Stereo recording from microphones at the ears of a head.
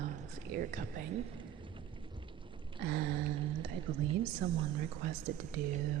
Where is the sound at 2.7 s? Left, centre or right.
Right.